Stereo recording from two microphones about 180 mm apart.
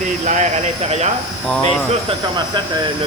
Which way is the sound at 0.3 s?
40° right (ahead or behind).